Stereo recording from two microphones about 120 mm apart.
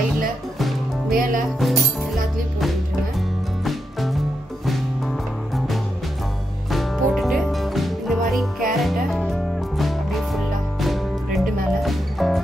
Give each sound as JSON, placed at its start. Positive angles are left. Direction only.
{"t": 1.1, "sound": "speech", "side_deg": 0}
{"t": 3.6, "sound": "music", "side_deg": 0}
{"t": 6.7, "sound": "music", "side_deg": 0}